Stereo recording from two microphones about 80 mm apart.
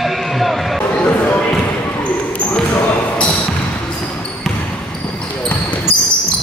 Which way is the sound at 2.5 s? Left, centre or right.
Centre.